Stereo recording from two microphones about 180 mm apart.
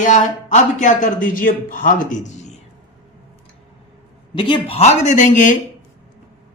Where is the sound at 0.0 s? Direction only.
45° left (ahead or behind).